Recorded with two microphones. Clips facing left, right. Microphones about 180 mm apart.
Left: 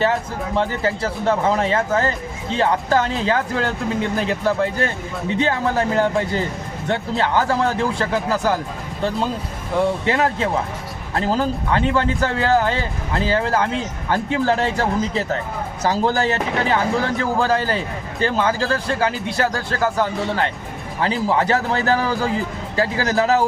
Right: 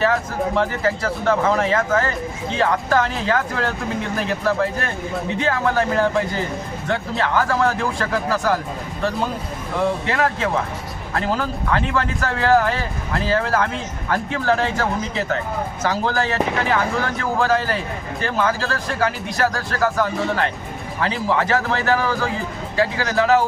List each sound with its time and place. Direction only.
0.0 s speech: 25° left (ahead or behind)
10.1 s speech: 30° left (ahead or behind)